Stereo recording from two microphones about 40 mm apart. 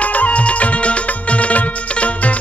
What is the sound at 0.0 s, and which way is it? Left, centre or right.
Music, left.